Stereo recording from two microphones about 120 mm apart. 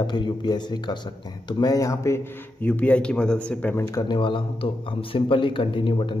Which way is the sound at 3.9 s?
40° left (ahead or behind).